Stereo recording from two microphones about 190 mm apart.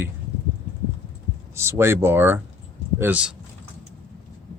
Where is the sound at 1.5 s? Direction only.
15° right (ahead or behind).